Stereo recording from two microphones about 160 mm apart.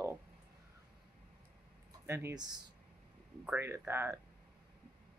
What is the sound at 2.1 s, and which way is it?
Speech, 15° right (ahead or behind).